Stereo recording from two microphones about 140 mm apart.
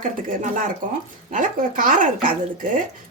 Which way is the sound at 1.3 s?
70° right (ahead or behind).